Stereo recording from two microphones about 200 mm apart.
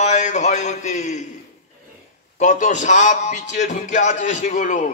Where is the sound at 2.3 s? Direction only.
35° left (ahead or behind).